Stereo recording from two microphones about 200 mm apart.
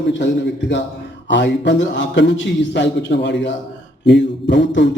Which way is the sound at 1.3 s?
60° left (ahead or behind).